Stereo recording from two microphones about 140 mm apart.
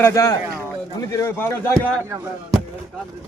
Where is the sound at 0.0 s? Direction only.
20° left (ahead or behind).